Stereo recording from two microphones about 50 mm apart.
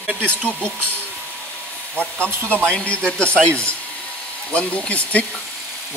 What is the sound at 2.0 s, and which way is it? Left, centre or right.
Speech, right.